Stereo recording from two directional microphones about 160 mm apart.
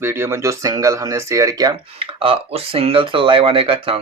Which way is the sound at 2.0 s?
35° right (ahead or behind).